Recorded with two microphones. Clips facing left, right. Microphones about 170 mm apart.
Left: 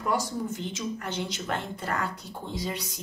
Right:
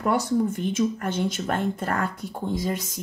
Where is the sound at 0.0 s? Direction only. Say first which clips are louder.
Right 6 dB; 65° right (ahead or behind).